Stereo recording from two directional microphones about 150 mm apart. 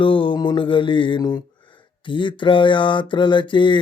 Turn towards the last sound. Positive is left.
turn(degrees=30)  # may be behind; listen again after turning